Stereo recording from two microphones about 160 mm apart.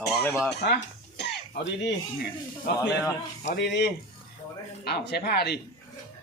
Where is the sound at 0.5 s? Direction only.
90° left.